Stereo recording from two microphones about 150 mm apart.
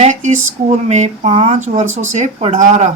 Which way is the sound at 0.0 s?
55° right (ahead or behind).